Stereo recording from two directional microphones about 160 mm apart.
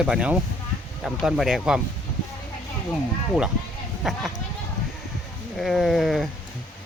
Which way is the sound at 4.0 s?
Centre (ahead or behind).